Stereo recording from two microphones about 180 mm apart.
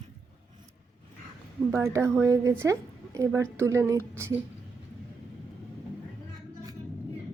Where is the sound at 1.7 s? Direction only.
15° right (ahead or behind).